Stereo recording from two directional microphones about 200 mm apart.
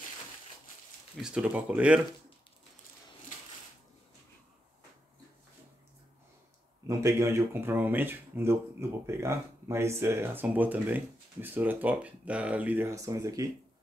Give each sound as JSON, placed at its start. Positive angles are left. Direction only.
{"t": 1.2, "sound": "speech", "side_deg": -5}
{"t": 6.9, "sound": "speech", "side_deg": -15}